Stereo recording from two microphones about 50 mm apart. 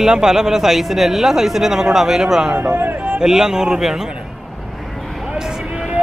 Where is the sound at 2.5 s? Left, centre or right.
Right.